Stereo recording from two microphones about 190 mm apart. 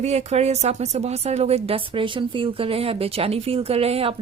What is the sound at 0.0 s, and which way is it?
Speech, 35° right (ahead or behind).